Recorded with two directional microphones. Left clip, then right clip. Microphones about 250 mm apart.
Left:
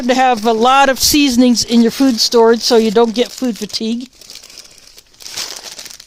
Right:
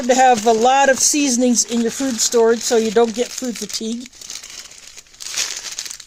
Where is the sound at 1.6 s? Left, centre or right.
Left.